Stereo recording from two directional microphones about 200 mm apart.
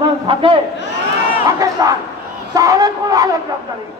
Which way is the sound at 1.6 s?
20° right (ahead or behind).